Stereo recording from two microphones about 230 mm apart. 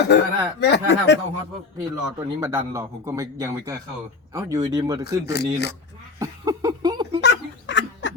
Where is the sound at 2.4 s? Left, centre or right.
Centre.